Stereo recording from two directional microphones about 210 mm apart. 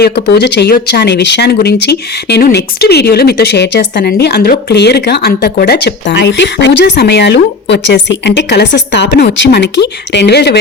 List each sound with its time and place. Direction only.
0.0 s speech: 55° left (ahead or behind)